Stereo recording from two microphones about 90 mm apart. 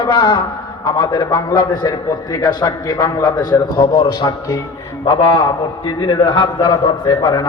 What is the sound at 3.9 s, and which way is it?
A man's voice, 60° left (ahead or behind).